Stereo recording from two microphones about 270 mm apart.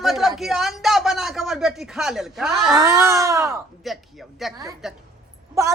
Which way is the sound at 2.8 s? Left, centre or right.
Centre.